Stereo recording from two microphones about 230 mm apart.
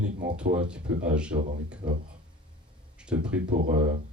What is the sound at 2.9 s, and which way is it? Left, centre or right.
Speech, centre.